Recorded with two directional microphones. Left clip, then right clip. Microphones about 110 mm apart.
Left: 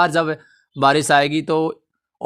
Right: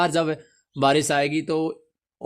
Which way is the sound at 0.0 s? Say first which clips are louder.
Left 5 dB; 25° left (ahead or behind).